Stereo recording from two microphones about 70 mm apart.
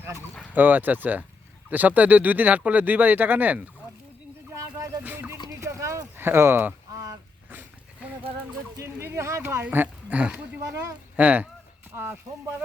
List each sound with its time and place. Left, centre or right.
0.5 s speech: right
5.0 s music: right
5.5 s a sound: right
6.1 s speech: right
6.9 s a sound: right
8.8 s speech: right
9.6 s speech: right
10.6 s speech: right
11.2 s speech: right
11.9 s speech: right